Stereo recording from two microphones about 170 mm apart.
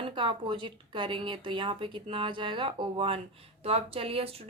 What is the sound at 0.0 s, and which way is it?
Speech, 30° right (ahead or behind).